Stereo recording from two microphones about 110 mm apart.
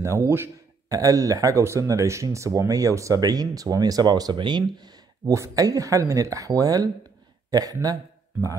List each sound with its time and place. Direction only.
0.0 s a sound: 25° right (ahead or behind)
0.9 s speech: 30° right (ahead or behind)
5.2 s a man's voice: 30° right (ahead or behind)